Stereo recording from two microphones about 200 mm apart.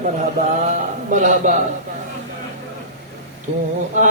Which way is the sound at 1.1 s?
40° right (ahead or behind).